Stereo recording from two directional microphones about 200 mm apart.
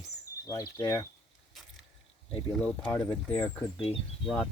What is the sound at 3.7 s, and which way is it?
Speech, 30° left (ahead or behind).